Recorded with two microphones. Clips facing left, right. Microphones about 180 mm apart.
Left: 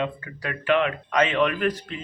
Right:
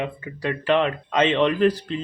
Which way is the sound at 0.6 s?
35° right (ahead or behind).